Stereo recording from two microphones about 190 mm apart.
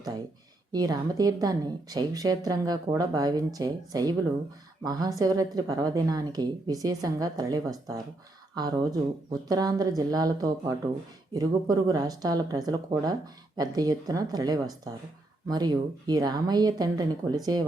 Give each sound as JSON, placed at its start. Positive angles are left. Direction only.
{"t": 0.7, "sound": "speech", "side_deg": -20}